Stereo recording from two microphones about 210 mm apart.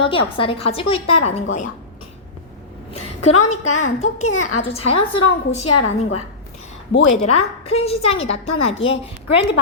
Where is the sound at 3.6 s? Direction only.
90° left.